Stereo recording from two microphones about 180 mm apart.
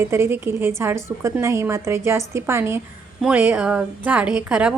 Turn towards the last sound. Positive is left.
turn(degrees=-5)  # may be behind; listen again after turning